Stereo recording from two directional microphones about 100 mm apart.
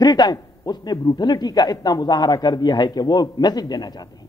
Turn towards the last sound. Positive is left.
turn(degrees=45)  # may be behind; listen again after turning